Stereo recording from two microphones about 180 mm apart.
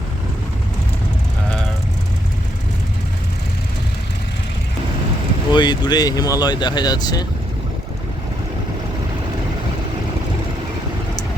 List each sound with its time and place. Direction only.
5.5 s speech: 25° left (ahead or behind)